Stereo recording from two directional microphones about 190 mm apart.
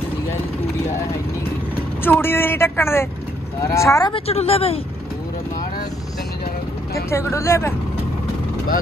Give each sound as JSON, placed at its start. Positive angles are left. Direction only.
{"t": 2.0, "sound": "speech", "side_deg": 10}
{"t": 4.1, "sound": "speech", "side_deg": 30}
{"t": 7.1, "sound": "speech", "side_deg": 15}